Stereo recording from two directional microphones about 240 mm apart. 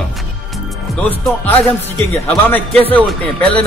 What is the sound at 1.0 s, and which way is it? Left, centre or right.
Speech, centre.